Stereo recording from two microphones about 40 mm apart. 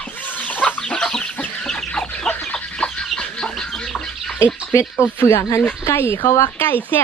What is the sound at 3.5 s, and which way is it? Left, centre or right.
Bird, centre.